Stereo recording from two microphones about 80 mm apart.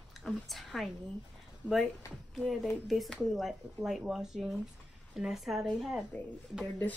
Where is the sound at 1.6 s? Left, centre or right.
Centre.